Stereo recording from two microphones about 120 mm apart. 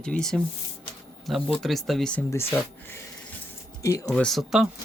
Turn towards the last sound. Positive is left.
turn(degrees=0)  # may be behind; listen again after turning